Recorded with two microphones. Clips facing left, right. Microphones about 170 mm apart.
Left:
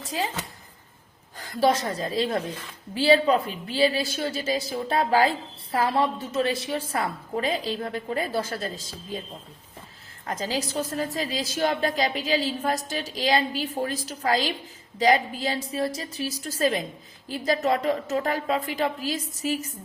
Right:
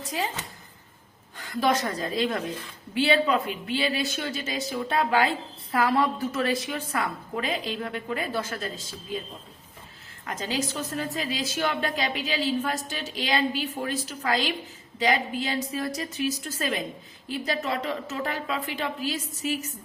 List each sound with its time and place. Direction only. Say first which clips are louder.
1.4 s speech: left 2 dB; 35° left (ahead or behind)
10.2 s speech: left 1 dB; 35° left (ahead or behind)